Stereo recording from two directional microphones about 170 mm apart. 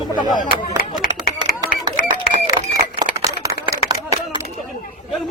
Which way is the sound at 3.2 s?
20° right (ahead or behind).